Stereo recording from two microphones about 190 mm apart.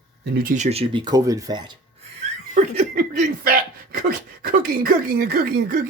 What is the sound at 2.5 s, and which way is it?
Speech, 40° right (ahead or behind).